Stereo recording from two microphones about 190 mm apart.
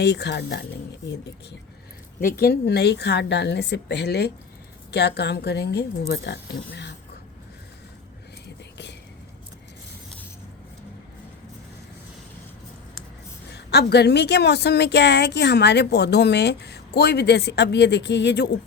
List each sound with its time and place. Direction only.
0.0 s a woman's voice: 60° left (ahead or behind)
2.2 s a woman's voice: 55° left (ahead or behind)
8.4 s whispering: 65° left (ahead or behind)
13.5 s a woman's voice: 60° left (ahead or behind)